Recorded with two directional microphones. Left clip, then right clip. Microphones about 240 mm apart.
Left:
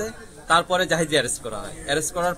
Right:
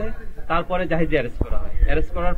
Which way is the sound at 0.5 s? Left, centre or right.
Left.